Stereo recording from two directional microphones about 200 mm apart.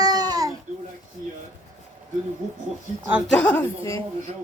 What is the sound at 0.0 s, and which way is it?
Baby cry, 20° right (ahead or behind).